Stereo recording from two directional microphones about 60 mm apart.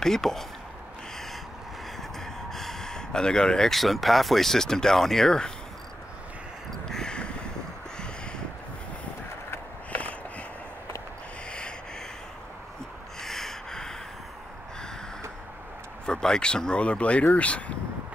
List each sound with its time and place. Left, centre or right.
0.0 s speech: centre
2.1 s speech: centre
6.9 s a sound: centre
13.2 s snort: centre
16.1 s speech: centre